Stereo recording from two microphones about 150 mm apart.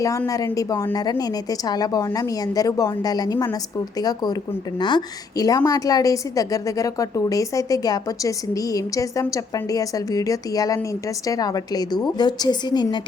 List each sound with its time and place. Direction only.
0.0 s a woman's voice: 20° left (ahead or behind)